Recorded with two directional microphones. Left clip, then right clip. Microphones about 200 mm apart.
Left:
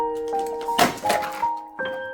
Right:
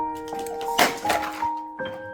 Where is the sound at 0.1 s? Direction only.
15° right (ahead or behind).